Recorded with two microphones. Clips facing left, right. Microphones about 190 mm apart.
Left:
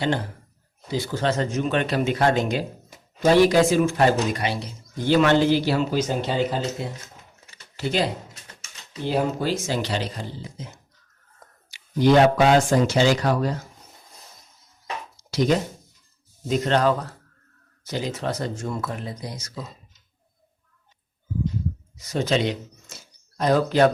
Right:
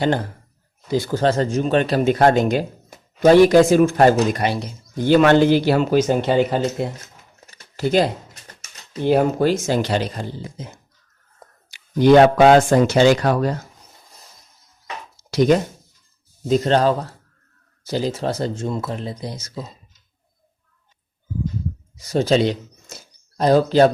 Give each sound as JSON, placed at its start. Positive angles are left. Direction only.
{"t": 0.9, "sound": "speech", "side_deg": -45}
{"t": 7.5, "sound": "speech", "side_deg": -45}
{"t": 9.0, "sound": "speech", "side_deg": -55}
{"t": 11.7, "sound": "speech", "side_deg": -60}
{"t": 16.5, "sound": "speech", "side_deg": -35}
{"t": 21.9, "sound": "speech", "side_deg": -35}